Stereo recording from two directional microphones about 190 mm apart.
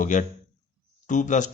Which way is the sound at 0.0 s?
40° left (ahead or behind).